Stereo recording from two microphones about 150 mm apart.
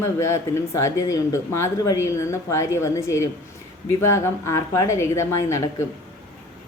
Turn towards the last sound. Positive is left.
turn(degrees=20)  # may be behind; listen again after turning